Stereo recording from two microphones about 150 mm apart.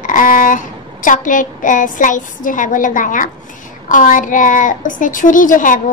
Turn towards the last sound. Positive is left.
turn(degrees=60)  # may be behind; listen again after turning